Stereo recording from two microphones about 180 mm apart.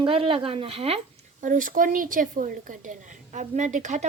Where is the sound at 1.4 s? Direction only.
45° right (ahead or behind).